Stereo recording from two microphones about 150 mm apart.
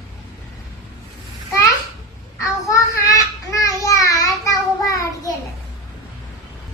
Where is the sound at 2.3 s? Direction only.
20° left (ahead or behind).